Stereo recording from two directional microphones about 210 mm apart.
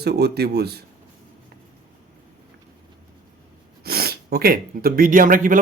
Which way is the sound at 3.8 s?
50° right (ahead or behind).